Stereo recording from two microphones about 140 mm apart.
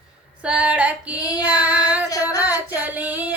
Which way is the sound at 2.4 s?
10° right (ahead or behind).